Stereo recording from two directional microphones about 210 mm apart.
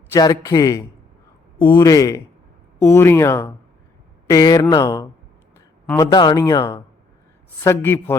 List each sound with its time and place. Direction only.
0.1 s speech: 15° left (ahead or behind)
5.8 s a man's voice: 5° left (ahead or behind)
6.1 s speech: 20° left (ahead or behind)